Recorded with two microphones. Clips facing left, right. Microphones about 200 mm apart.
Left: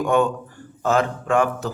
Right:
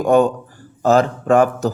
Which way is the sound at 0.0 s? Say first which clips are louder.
Right 5 dB; 35° right (ahead or behind).